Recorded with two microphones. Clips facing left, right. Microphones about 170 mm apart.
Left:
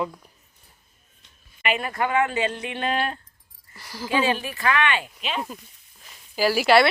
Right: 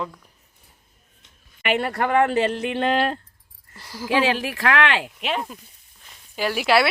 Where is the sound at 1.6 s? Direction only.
70° right (ahead or behind).